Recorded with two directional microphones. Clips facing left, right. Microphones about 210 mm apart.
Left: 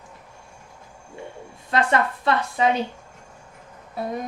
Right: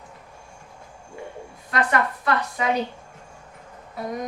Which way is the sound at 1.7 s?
25° left (ahead or behind).